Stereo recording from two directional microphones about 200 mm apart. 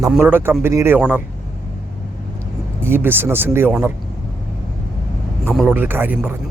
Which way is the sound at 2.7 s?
10° right (ahead or behind).